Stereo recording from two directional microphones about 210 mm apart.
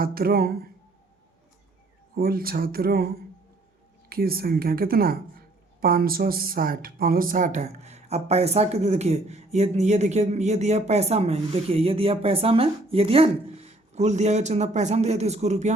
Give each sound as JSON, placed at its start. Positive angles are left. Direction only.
{"t": 0.0, "sound": "speech", "side_deg": -45}
{"t": 2.1, "sound": "speech", "side_deg": -45}
{"t": 4.1, "sound": "speech", "side_deg": -45}